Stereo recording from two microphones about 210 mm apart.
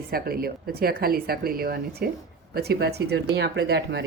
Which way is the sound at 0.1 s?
45° right (ahead or behind).